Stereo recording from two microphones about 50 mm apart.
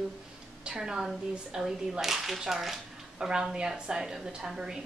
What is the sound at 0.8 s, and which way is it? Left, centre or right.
Speech, centre.